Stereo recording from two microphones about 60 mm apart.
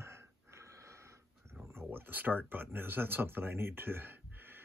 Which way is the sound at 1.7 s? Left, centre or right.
Right.